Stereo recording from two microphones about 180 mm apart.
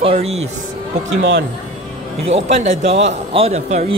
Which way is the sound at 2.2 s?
35° right (ahead or behind).